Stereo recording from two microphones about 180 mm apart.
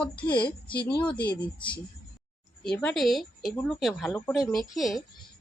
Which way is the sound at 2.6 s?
5° left (ahead or behind).